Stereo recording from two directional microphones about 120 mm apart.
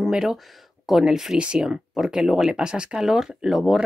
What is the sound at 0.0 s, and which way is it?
Speech, 5° right (ahead or behind).